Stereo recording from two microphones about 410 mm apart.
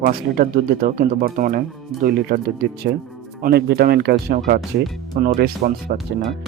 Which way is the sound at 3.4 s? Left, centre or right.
Right.